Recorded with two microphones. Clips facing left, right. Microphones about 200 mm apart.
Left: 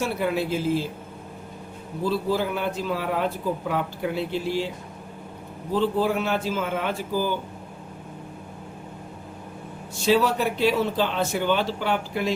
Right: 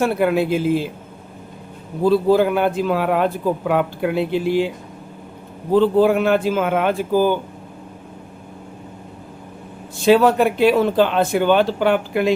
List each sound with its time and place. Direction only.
0.0 s speech: 60° right (ahead or behind)
2.0 s speech: 60° right (ahead or behind)
5.7 s speech: 60° right (ahead or behind)
10.1 s speech: 60° right (ahead or behind)